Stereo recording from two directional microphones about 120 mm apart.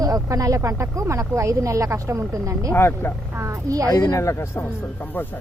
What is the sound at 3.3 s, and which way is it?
Speech, 25° right (ahead or behind).